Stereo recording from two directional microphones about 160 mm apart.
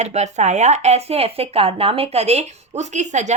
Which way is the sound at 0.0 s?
45° right (ahead or behind).